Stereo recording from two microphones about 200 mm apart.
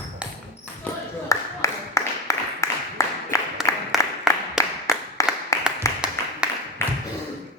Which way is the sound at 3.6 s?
Centre (ahead or behind).